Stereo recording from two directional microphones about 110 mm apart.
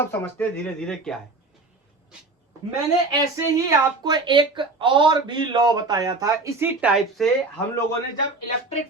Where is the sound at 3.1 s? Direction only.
30° right (ahead or behind).